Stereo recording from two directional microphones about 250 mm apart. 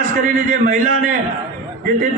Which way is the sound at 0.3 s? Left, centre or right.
Right.